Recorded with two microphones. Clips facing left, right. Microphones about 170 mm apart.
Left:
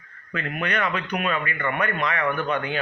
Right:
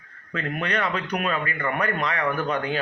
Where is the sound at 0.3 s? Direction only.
30° right (ahead or behind).